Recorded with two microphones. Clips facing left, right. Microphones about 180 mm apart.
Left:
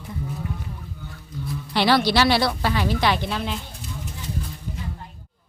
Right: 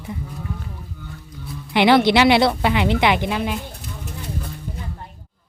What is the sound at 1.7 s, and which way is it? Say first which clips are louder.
Speech: right 5 dB; 20° right (ahead or behind).